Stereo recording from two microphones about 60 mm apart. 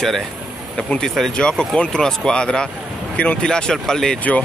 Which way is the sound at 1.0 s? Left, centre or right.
Centre.